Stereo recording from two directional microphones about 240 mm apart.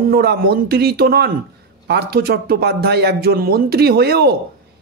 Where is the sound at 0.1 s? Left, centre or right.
Right.